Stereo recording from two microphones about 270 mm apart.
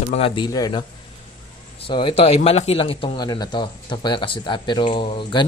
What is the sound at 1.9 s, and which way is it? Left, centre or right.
Speech, centre.